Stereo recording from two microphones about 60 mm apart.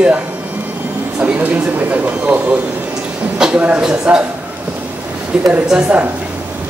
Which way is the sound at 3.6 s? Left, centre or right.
Right.